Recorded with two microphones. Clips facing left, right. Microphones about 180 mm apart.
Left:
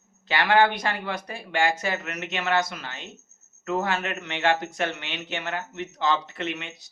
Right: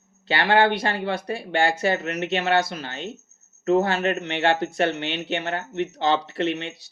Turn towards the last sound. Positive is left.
turn(degrees=-30)  # may be behind; listen again after turning